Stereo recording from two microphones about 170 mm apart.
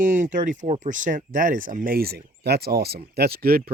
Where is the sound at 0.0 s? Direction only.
50° right (ahead or behind).